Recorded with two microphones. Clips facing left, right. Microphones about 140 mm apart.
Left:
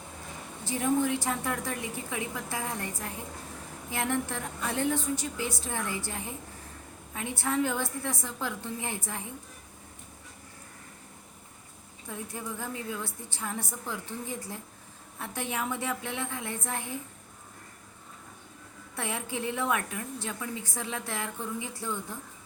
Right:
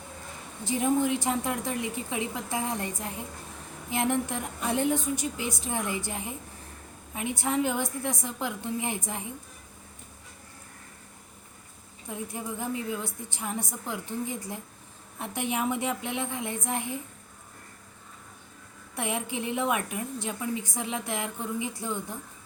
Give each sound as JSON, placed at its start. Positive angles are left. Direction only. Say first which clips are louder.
{"t": 0.6, "sound": "a woman's voice", "louder": "right 2 dB", "side_deg": -20}
{"t": 12.0, "sound": "a woman's voice", "louder": "right 3 dB", "side_deg": -15}
{"t": 18.9, "sound": "a woman's voice", "louder": "right 3 dB", "side_deg": -20}